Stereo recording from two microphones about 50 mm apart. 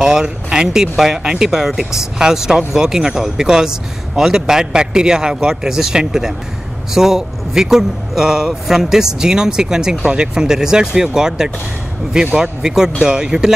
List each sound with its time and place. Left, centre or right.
0.0 s speech: centre